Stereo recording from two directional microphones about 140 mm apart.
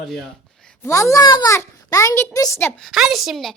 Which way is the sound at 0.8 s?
20° left (ahead or behind).